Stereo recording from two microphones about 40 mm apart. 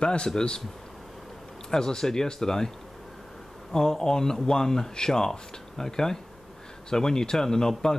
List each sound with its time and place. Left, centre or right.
0.0 s speech: left
1.7 s speech: centre
3.7 s speech: centre